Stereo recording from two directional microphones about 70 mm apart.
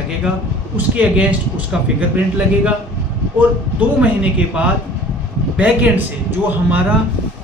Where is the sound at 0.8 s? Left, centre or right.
Right.